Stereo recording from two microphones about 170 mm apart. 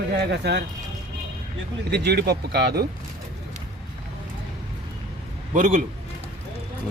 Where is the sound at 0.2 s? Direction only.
80° right.